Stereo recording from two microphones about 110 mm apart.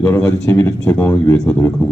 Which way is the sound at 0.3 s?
30° left (ahead or behind).